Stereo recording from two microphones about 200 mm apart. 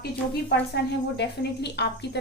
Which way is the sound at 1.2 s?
55° left (ahead or behind).